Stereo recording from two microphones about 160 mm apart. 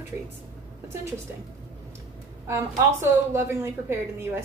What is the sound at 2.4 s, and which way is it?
A woman's voice, 15° right (ahead or behind).